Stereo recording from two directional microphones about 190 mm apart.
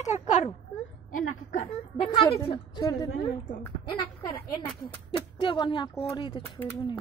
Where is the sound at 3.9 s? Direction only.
25° left (ahead or behind).